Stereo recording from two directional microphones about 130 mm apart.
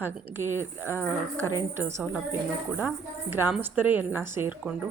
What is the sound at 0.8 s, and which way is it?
Speech, 20° left (ahead or behind).